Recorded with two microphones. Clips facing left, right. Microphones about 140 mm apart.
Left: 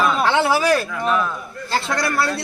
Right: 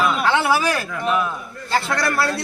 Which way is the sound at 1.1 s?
10° right (ahead or behind).